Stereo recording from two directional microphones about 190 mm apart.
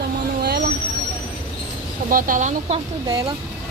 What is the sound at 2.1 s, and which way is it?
Speech, 45° right (ahead or behind).